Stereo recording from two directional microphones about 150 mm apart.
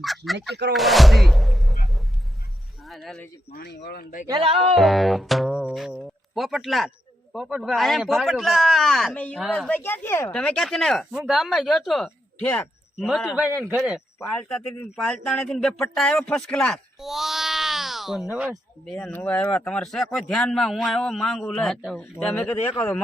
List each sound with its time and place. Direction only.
0.7 s speech: centre (ahead or behind)
3.5 s speech: 90° left
4.3 s music: 35° right (ahead or behind)
4.7 s speech: centre (ahead or behind)
13.0 s speech: centre (ahead or behind)
14.2 s speech: 20° left (ahead or behind)
14.5 s speech: 5° left (ahead or behind)